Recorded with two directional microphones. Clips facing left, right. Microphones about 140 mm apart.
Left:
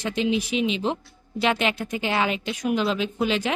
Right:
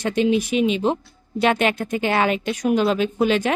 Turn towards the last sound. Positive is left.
turn(degrees=-50)  # may be behind; listen again after turning